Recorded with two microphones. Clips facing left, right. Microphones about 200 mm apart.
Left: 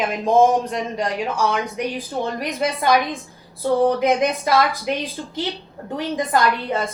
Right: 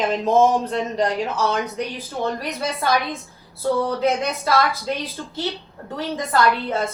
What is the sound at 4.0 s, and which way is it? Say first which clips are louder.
A woman's voice: left 3 dB; 15° left (ahead or behind).